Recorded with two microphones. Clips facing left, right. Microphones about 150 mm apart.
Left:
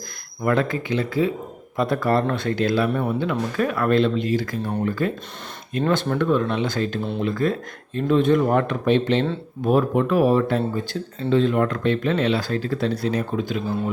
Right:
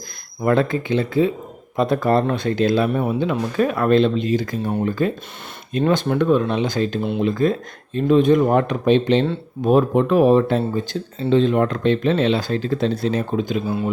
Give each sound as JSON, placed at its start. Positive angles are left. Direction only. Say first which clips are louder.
{"t": 0.4, "sound": "speech", "louder": "right 3 dB", "side_deg": -25}